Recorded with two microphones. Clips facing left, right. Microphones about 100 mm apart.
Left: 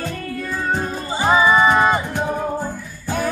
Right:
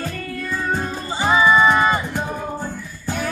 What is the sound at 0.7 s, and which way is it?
Music, 20° left (ahead or behind).